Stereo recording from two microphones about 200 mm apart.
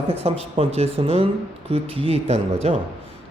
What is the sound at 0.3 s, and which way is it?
A man's voice, 30° right (ahead or behind).